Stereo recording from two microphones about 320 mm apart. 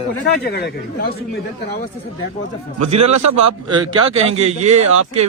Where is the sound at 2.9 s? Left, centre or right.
Right.